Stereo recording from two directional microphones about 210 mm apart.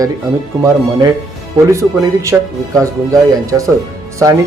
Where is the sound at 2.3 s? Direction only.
10° right (ahead or behind).